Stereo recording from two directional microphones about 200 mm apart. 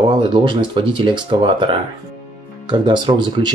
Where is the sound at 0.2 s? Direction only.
25° right (ahead or behind).